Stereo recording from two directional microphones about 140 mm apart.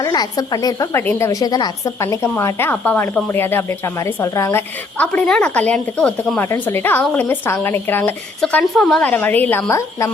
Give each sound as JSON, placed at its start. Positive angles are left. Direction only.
{"t": 0.0, "sound": "a woman's voice", "side_deg": 30}
{"t": 8.4, "sound": "a woman's voice", "side_deg": 5}